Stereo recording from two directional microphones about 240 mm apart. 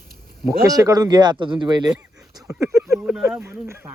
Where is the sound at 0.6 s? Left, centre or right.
Centre.